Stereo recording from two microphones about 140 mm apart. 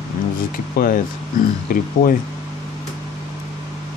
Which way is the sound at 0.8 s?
90° left.